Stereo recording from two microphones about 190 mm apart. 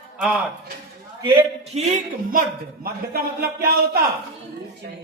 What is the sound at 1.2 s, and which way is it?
Speech, 30° right (ahead or behind).